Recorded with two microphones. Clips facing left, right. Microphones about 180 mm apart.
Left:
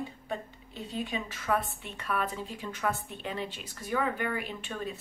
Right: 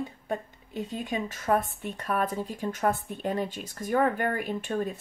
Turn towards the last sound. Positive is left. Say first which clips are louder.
# right 7 dB
turn(degrees=-45)  # may be behind; listen again after turning